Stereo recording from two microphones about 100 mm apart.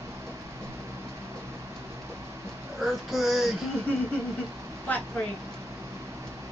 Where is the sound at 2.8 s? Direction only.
Centre (ahead or behind).